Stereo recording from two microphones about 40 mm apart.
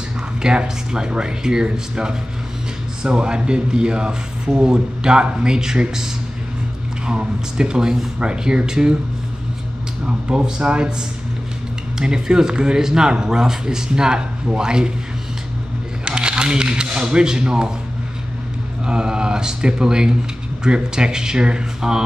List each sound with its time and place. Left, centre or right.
0.4 s speech: right
7.1 s speech: right
10.0 s speech: right
12.0 s speech: centre
16.1 s speech: right
18.9 s speech: right